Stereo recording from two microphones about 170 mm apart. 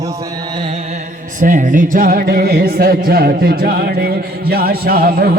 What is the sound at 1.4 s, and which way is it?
Music, 50° right (ahead or behind).